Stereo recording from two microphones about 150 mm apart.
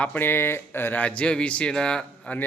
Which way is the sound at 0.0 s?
10° left (ahead or behind).